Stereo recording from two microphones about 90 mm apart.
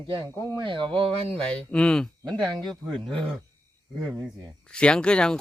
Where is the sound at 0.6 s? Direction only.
70° right (ahead or behind).